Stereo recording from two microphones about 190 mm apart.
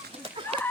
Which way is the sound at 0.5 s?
30° right (ahead or behind).